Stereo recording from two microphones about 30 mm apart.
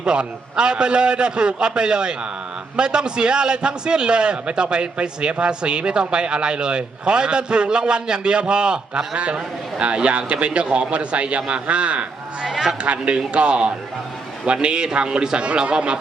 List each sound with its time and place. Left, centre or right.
0.0 s a man's voice: right
9.1 s a man's voice: right
12.5 s a sound: centre
12.8 s a man's voice: right